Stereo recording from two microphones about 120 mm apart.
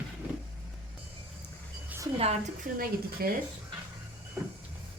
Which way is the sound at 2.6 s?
90° right.